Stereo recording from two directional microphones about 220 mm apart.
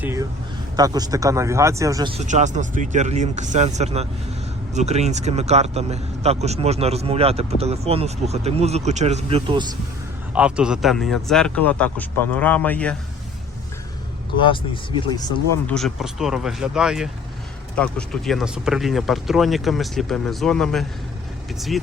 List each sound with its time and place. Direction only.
0.0 s speech: 10° right (ahead or behind)
2.2 s speech: 35° right (ahead or behind)
10.3 s speech: 5° right (ahead or behind)
14.4 s speech: 20° left (ahead or behind)
15.6 s speech: centre (ahead or behind)